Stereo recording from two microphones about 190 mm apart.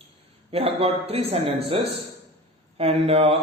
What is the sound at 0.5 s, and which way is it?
A man's voice, 30° right (ahead or behind).